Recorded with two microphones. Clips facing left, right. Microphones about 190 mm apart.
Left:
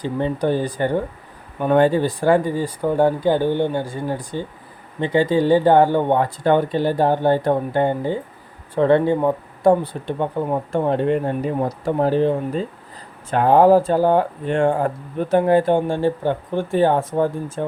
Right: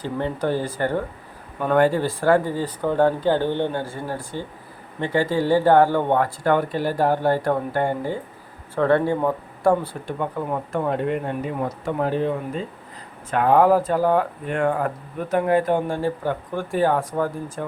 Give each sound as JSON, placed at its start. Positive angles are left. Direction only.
{"t": 0.0, "sound": "speech", "side_deg": 15}